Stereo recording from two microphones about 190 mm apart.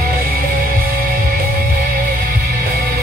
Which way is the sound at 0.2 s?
50° right (ahead or behind).